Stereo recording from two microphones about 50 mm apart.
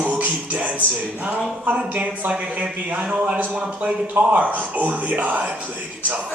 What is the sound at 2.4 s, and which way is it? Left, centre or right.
A man's voice, right.